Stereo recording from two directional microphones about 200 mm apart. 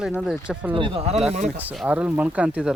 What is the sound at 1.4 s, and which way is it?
Speech, 5° right (ahead or behind).